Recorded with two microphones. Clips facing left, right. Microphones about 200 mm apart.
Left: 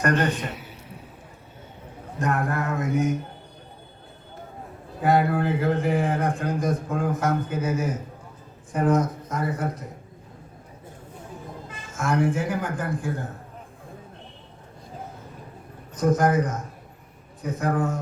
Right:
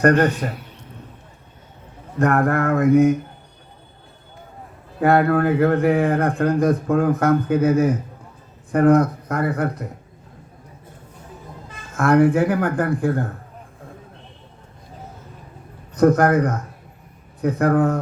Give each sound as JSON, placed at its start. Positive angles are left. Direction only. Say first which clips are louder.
{"t": 0.2, "sound": "a man's voice", "louder": "right 6 dB", "side_deg": -10}
{"t": 0.5, "sound": "a sound", "louder": "right 1 dB", "side_deg": 5}
{"t": 2.1, "sound": "a man's voice", "louder": "right 8 dB", "side_deg": -60}
{"t": 4.9, "sound": "a man's voice", "louder": "right 5 dB", "side_deg": -60}
{"t": 11.9, "sound": "a man's voice", "louder": "right 8 dB", "side_deg": -60}
{"t": 16.0, "sound": "a man's voice", "louder": "right 6 dB", "side_deg": -60}